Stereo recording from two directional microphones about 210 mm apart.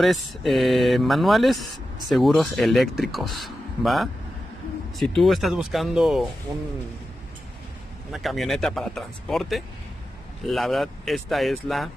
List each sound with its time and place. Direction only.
0.0 s speech: centre (ahead or behind)
8.1 s speech: centre (ahead or behind)